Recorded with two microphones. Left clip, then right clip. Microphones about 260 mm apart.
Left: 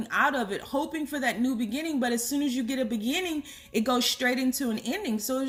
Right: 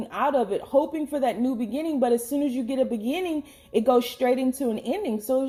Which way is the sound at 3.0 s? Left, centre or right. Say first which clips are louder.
Right 2 dB; left.